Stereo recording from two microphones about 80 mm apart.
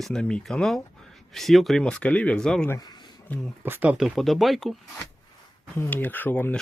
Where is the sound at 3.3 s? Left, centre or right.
Left.